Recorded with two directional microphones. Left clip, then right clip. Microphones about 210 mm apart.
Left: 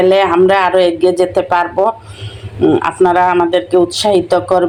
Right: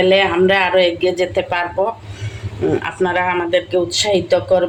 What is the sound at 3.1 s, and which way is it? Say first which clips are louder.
Speech: left 3 dB; 20° left (ahead or behind).